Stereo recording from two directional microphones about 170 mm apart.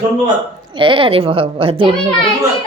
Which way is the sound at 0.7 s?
30° right (ahead or behind).